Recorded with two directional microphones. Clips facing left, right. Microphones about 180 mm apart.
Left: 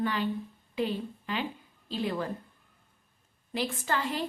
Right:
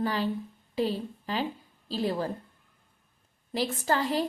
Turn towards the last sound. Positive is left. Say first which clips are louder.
# right 4 dB
turn(degrees=-35)  # may be behind; listen again after turning